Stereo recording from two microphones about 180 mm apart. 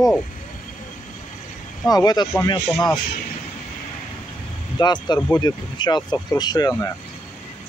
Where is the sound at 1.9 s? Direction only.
20° left (ahead or behind).